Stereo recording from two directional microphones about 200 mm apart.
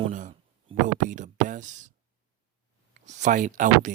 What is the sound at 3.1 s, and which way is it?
Speech, 35° right (ahead or behind).